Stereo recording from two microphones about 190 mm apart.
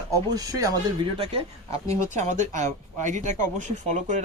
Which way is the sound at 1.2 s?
30° right (ahead or behind).